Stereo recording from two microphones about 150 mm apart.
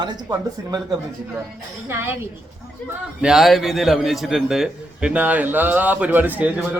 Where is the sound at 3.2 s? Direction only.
5° right (ahead or behind).